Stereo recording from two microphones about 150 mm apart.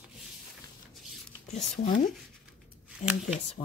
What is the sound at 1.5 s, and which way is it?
Speech, 60° left (ahead or behind).